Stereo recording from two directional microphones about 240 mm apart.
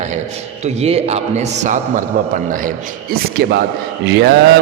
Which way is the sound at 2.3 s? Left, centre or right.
Right.